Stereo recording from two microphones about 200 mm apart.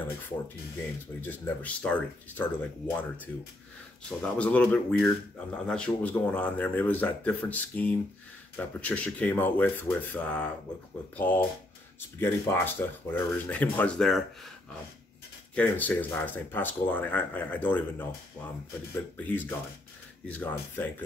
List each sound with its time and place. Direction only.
1.2 s speech: 10° left (ahead or behind)
4.2 s speech: 5° left (ahead or behind)
15.5 s speech: 10° left (ahead or behind)